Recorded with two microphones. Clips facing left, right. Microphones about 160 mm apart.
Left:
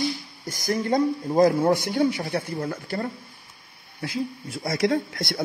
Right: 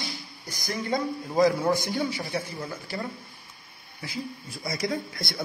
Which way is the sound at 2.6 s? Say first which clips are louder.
Left 5 dB; 50° left (ahead or behind).